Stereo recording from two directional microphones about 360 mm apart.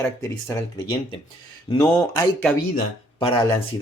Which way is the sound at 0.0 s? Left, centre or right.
Centre.